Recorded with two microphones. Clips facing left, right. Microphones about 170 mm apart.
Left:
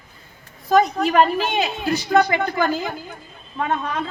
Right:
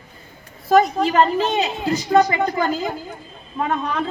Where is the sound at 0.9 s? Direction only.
25° right (ahead or behind).